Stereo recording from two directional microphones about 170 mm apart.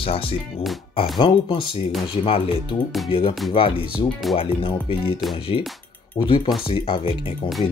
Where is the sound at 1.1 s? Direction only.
30° left (ahead or behind).